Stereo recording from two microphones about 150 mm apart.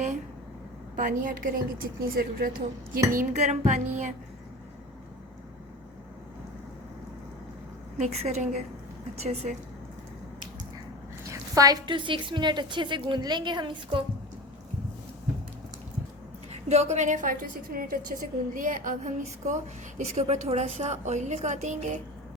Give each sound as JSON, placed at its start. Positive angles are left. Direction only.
{"t": 0.9, "sound": "a woman's voice", "side_deg": -65}
{"t": 3.1, "sound": "a woman's voice", "side_deg": -55}
{"t": 7.9, "sound": "a woman's voice", "side_deg": -50}
{"t": 11.3, "sound": "a woman's voice", "side_deg": -25}
{"t": 16.5, "sound": "a woman's voice", "side_deg": -45}
{"t": 17.7, "sound": "speech", "side_deg": -70}
{"t": 20.0, "sound": "a woman's voice", "side_deg": -45}